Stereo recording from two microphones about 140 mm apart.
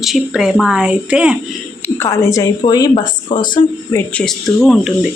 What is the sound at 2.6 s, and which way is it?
Speech, 30° left (ahead or behind).